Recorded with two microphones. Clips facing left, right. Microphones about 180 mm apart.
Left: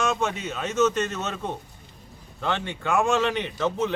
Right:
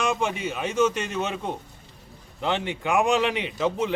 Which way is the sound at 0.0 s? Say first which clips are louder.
Even; 15° right (ahead or behind).